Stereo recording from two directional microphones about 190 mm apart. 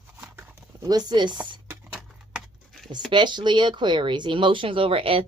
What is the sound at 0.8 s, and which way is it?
Speech, 20° right (ahead or behind).